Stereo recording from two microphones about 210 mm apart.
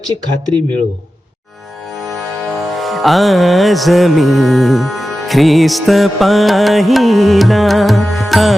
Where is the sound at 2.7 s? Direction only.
Centre (ahead or behind).